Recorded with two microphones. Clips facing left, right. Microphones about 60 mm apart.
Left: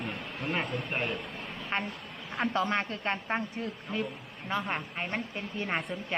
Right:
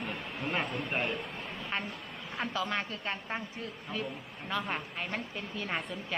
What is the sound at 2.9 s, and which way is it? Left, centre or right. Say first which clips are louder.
Speech: left 5 dB; left.